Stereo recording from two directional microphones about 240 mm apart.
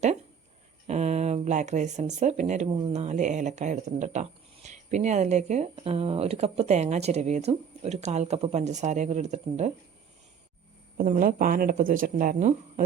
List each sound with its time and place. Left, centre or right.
0.9 s speech: right
10.9 s speech: right